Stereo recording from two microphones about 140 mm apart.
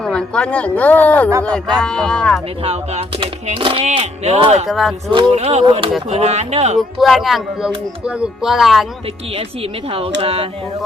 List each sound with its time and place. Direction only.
0.0 s speech: 5° left (ahead or behind)
1.3 s speech: 20° right (ahead or behind)
1.5 s speech: 5° left (ahead or behind)
3.2 s speech: 40° right (ahead or behind)
4.7 s speech: centre (ahead or behind)
5.3 s speech: 50° right (ahead or behind)
6.7 s speech: centre (ahead or behind)
9.9 s speech: 45° right (ahead or behind)